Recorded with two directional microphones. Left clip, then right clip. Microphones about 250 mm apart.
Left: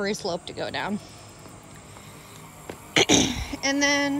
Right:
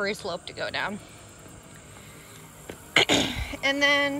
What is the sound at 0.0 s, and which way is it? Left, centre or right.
Speech, centre.